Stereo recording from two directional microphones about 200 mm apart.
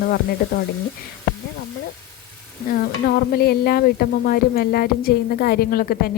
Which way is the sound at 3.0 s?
50° left (ahead or behind).